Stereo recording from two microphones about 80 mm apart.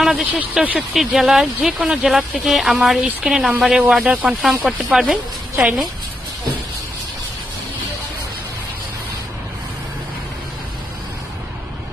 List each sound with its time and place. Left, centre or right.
0.1 s speech: centre
0.8 s speech: centre